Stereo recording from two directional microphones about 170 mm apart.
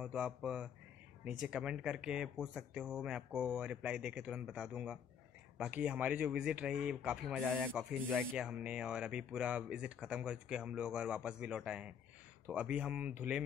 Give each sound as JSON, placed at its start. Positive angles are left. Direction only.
{"t": 0.0, "sound": "speech", "side_deg": -5}